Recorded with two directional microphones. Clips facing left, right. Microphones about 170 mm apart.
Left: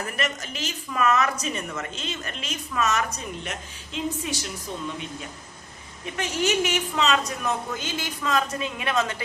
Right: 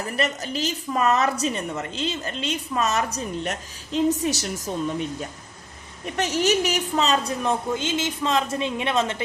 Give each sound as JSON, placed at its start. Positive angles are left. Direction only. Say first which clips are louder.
{"t": 0.2, "sound": "a woman's voice", "louder": "right 8 dB", "side_deg": -35}
{"t": 6.1, "sound": "a woman's voice", "louder": "right 3 dB", "side_deg": -40}